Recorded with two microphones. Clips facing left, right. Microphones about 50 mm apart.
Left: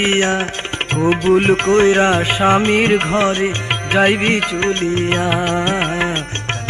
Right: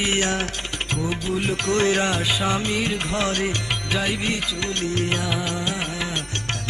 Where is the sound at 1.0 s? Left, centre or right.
Left.